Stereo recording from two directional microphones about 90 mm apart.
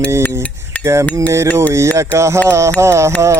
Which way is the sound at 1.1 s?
35° right (ahead or behind).